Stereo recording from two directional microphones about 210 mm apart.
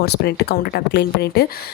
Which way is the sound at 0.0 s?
50° left (ahead or behind).